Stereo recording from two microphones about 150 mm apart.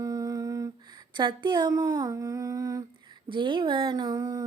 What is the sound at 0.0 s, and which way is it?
Humming, 25° right (ahead or behind).